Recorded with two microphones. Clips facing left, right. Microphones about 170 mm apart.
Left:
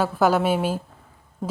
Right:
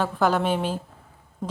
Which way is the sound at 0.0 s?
10° left (ahead or behind).